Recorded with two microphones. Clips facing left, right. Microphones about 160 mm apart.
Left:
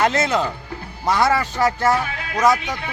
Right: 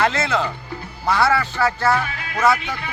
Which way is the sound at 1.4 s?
15° left (ahead or behind).